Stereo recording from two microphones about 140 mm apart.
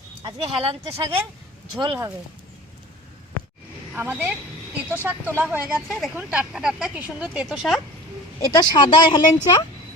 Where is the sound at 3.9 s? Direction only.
15° right (ahead or behind).